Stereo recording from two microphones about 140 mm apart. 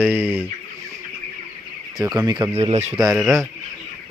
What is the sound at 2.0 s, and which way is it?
Speech, 30° right (ahead or behind).